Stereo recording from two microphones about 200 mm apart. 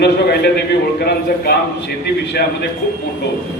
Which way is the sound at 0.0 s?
55° left (ahead or behind).